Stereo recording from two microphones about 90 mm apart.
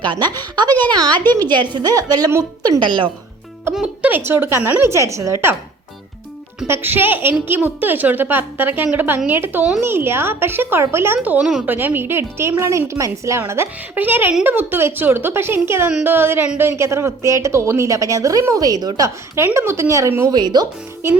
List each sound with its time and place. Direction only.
0.0 s a woman's voice: 55° right (ahead or behind)
2.8 s speech: 60° right (ahead or behind)
3.8 s music: 15° right (ahead or behind)
4.2 s speech: 25° right (ahead or behind)
6.7 s a woman's voice: 25° right (ahead or behind)
20.3 s a woman's voice: 55° right (ahead or behind)